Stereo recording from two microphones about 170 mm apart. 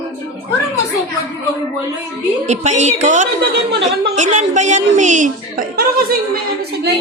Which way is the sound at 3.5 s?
80° right.